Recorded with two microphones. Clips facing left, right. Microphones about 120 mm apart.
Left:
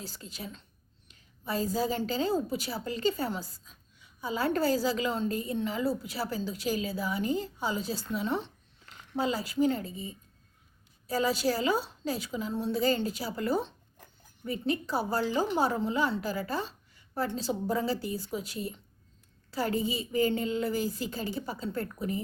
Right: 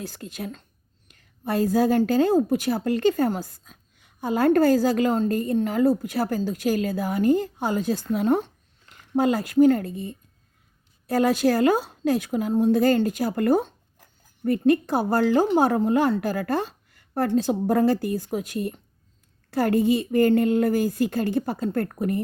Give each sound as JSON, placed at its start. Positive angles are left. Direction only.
{"t": 0.0, "sound": "a woman's voice", "side_deg": -55}